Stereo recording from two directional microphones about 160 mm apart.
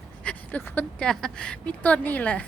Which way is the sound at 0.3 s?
10° left (ahead or behind).